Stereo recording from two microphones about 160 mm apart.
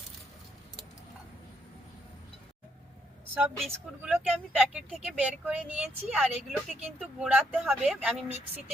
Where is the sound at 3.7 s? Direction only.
10° right (ahead or behind).